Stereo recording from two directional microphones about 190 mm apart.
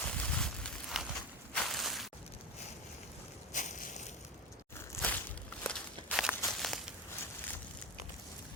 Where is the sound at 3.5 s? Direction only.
45° left (ahead or behind).